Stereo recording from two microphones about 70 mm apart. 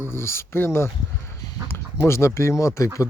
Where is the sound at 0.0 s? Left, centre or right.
Left.